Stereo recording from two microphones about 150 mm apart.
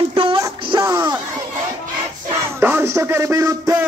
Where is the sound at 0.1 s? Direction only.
35° right (ahead or behind).